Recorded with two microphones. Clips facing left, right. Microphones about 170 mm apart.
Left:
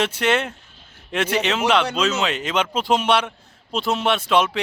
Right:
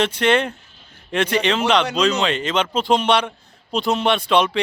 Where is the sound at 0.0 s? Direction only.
10° left (ahead or behind).